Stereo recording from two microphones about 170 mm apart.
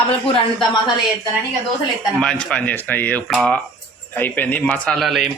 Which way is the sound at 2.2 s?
5° left (ahead or behind).